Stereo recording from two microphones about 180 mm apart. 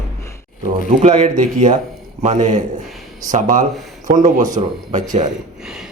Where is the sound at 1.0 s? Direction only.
40° right (ahead or behind).